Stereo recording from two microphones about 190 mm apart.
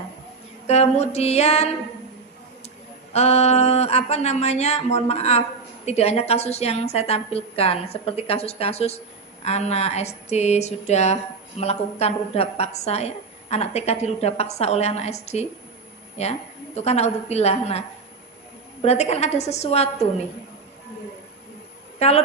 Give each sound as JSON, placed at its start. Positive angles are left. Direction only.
{"t": 0.7, "sound": "a woman's voice", "side_deg": 35}
{"t": 3.1, "sound": "a woman's voice", "side_deg": 35}
{"t": 21.9, "sound": "speech", "side_deg": 35}